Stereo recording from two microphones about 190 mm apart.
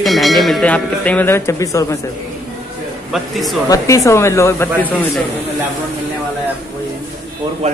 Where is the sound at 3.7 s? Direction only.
15° left (ahead or behind).